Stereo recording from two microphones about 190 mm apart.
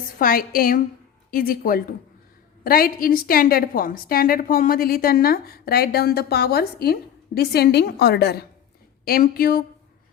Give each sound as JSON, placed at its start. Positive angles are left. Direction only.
{"t": 0.2, "sound": "a woman's voice", "side_deg": 50}